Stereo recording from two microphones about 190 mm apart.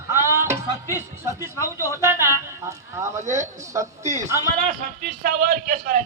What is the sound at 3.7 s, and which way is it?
Speech, 15° right (ahead or behind).